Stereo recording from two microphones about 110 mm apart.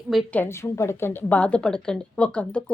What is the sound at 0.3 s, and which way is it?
A woman's voice, 25° left (ahead or behind).